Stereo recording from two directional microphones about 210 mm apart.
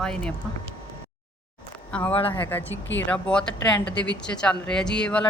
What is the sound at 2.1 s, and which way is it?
Speech, 25° left (ahead or behind).